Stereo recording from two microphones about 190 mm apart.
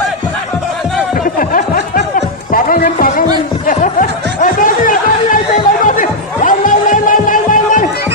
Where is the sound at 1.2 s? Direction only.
45° left (ahead or behind).